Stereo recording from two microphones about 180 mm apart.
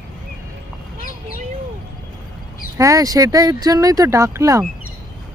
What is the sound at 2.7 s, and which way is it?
Speech, 20° right (ahead or behind).